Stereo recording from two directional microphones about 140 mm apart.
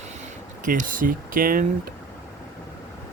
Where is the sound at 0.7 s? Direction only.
75° right (ahead or behind).